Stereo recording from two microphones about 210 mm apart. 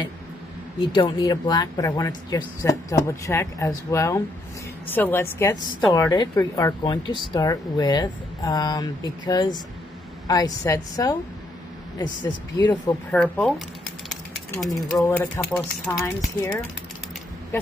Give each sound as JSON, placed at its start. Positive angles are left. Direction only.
{"t": 0.7, "sound": "speech", "side_deg": 25}
{"t": 13.1, "sound": "speech", "side_deg": 5}
{"t": 14.9, "sound": "speech", "side_deg": 10}